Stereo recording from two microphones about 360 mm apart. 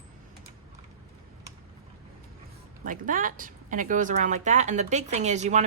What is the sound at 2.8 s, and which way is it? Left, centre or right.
Speech, right.